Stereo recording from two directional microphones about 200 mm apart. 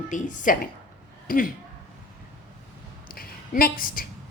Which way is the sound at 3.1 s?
45° left (ahead or behind).